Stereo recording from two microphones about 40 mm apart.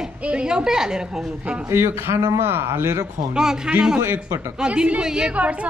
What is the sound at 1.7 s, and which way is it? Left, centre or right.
A man's voice, right.